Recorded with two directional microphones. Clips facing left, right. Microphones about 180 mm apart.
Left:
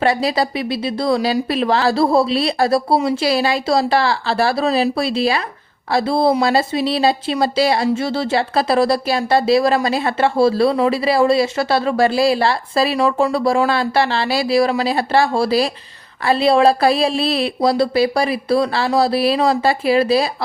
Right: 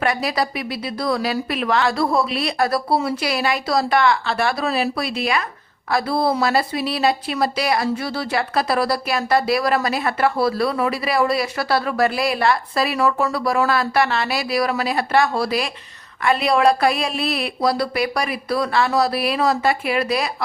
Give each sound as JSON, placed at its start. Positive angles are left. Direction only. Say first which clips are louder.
{"t": 0.0, "sound": "speech", "louder": "left 4 dB", "side_deg": 30}